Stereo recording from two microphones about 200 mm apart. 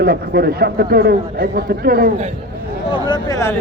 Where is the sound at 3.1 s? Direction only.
15° left (ahead or behind).